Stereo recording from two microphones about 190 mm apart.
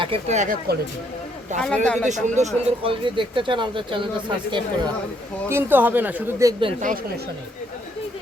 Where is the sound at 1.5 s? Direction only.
5° left (ahead or behind).